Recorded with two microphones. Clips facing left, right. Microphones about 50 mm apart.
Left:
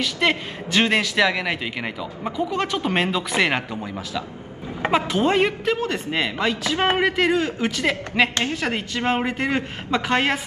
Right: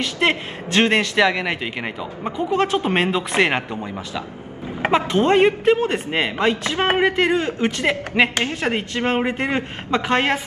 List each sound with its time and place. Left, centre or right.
0.2 s speech: right
1.1 s a man's voice: centre
2.4 s a man's voice: right
2.9 s a man's voice: centre
5.3 s speech: right